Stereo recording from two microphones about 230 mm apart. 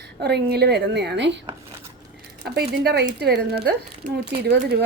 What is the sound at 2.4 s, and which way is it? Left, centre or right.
Speech, right.